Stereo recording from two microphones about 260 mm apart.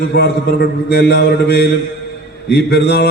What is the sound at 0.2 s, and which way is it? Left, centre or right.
Mantra, left.